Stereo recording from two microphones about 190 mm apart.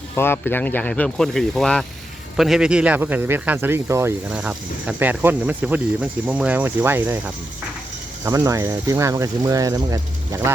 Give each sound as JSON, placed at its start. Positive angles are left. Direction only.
{"t": 0.2, "sound": "speech", "side_deg": 10}
{"t": 8.2, "sound": "speech", "side_deg": -15}